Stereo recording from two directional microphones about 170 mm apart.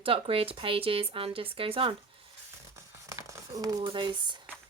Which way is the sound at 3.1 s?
20° right (ahead or behind).